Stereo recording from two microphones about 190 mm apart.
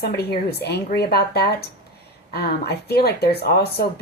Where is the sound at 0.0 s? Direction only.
55° left (ahead or behind).